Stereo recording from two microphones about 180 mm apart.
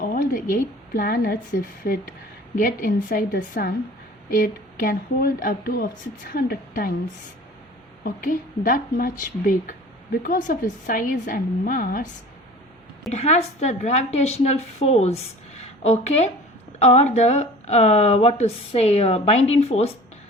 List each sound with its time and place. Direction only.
0.0 s a sound: 55° left (ahead or behind)
0.9 s a woman's voice: 55° left (ahead or behind)
8.0 s a woman's voice: 50° left (ahead or behind)
13.1 s speech: 40° left (ahead or behind)